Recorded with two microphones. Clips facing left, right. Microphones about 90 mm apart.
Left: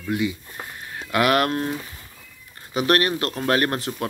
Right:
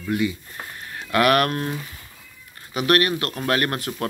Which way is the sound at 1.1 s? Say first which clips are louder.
Right 1 dB; 20° left (ahead or behind).